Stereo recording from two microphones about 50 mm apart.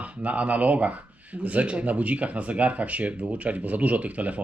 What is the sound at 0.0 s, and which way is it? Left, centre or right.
Speech, right.